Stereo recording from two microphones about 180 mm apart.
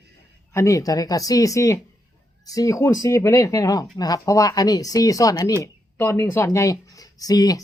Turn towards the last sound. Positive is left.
turn(degrees=20)  # may be behind; listen again after turning